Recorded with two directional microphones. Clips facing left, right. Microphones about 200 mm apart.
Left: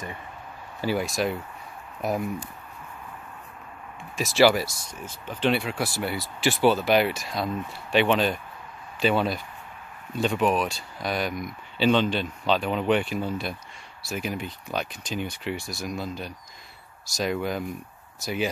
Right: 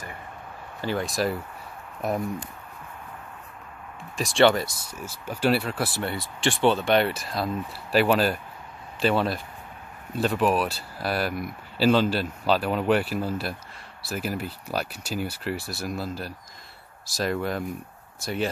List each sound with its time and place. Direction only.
0.7 s speech: 10° left (ahead or behind)
1.0 s speech: centre (ahead or behind)
4.2 s speech: 5° left (ahead or behind)
4.9 s speech: 10° right (ahead or behind)